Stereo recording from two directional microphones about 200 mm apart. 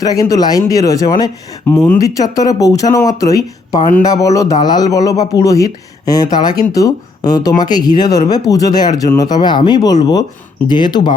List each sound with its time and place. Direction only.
0.0 s speech: 20° left (ahead or behind)